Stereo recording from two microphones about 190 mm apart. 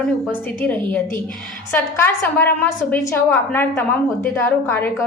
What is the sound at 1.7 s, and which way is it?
A woman's voice, 10° left (ahead or behind).